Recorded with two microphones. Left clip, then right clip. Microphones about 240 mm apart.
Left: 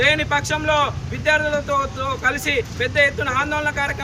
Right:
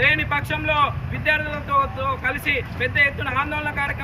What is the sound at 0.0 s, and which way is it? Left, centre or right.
Speech, centre.